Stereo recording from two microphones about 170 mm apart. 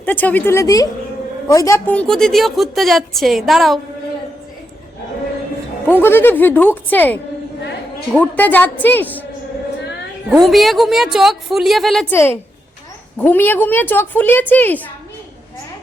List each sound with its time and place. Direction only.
0.0 s a woman's voice: 10° left (ahead or behind)
1.9 s a woman's voice: 5° left (ahead or behind)
5.9 s a woman's voice: 10° left (ahead or behind)
10.2 s a woman's voice: centre (ahead or behind)
12.1 s a woman's voice: 15° left (ahead or behind)